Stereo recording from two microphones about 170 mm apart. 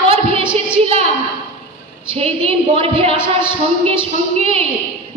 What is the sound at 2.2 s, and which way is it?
Speech, 35° right (ahead or behind).